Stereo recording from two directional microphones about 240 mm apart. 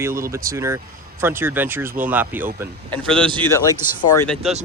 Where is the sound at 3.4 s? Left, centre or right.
Centre.